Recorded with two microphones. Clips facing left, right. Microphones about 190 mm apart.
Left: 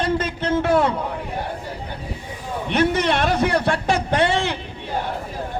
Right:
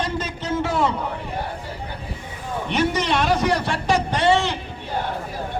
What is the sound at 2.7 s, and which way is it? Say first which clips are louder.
A man's voice: left 2 dB; 55° left (ahead or behind).